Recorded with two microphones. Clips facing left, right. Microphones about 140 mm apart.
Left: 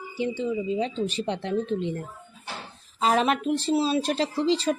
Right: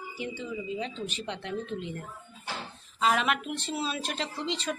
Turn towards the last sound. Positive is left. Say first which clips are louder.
# left 9 dB
turn(degrees=35)  # may be behind; listen again after turning